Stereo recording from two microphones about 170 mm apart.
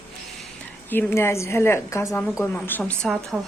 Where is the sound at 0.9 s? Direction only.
10° left (ahead or behind).